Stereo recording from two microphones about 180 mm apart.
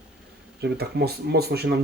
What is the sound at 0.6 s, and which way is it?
Speech, 65° right (ahead or behind).